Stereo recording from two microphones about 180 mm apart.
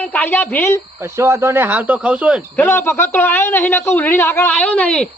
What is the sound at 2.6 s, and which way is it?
A man's voice, 15° left (ahead or behind).